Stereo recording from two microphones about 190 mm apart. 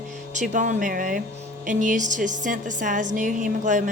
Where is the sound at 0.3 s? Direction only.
40° right (ahead or behind).